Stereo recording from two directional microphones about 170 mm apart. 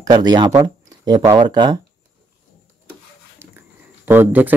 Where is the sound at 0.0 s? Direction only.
25° right (ahead or behind).